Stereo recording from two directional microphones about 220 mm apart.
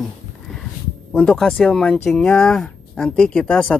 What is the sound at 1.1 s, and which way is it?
Speech, 5° left (ahead or behind).